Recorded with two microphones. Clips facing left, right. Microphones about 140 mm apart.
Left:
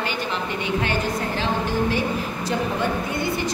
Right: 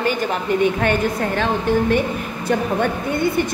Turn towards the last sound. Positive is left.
turn(degrees=-55)  # may be behind; listen again after turning